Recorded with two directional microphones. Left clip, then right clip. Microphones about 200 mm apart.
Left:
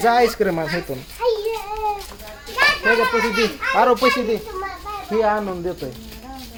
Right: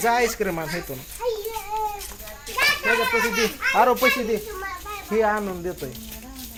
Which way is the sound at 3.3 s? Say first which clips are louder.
Left 2 dB; 20° right (ahead or behind).